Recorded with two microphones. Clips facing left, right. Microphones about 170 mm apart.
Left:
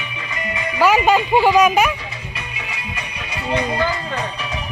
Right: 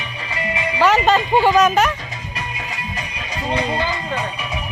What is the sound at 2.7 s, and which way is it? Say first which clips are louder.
Music: right 2 dB; 40° right (ahead or behind).